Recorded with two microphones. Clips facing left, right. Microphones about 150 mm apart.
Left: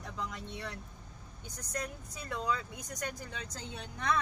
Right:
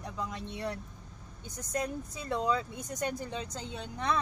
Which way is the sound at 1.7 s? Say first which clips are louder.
Right 6 dB; 25° right (ahead or behind).